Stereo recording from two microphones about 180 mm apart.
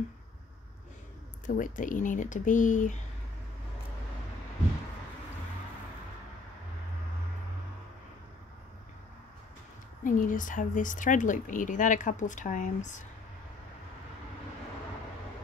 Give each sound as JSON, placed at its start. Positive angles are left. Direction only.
{"t": 1.4, "sound": "a woman's voice", "side_deg": 45}
{"t": 10.0, "sound": "a woman's voice", "side_deg": 45}